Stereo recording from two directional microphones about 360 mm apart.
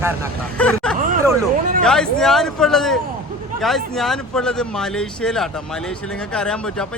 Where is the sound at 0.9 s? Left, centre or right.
Right.